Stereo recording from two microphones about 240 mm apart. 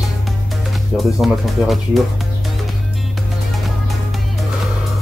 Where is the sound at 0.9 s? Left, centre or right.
Centre.